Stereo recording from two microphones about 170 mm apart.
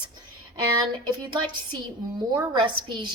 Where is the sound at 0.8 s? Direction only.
25° right (ahead or behind).